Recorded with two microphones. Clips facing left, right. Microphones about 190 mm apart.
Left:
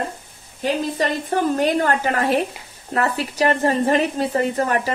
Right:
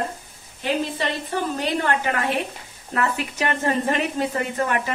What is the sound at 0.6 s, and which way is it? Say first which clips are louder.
Speech: left 3 dB; 40° left (ahead or behind).